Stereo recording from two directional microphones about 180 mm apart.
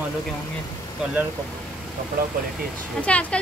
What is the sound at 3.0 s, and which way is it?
Speech, 5° left (ahead or behind).